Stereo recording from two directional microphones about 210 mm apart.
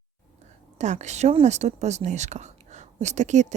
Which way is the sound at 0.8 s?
35° right (ahead or behind).